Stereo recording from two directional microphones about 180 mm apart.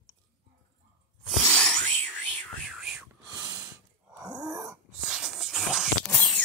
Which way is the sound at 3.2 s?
20° right (ahead or behind).